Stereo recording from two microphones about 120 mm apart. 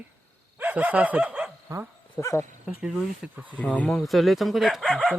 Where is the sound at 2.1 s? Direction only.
25° left (ahead or behind).